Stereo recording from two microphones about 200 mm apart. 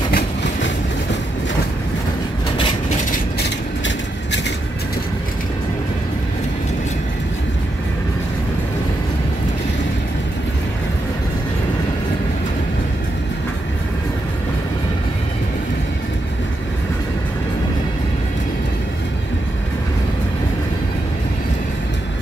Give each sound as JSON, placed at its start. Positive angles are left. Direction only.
{"t": 0.1, "sound": "vehicle", "side_deg": 60}
{"t": 3.3, "sound": "vehicle", "side_deg": 65}